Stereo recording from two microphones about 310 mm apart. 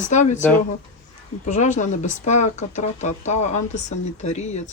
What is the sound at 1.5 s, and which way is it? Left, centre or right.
Speech, left.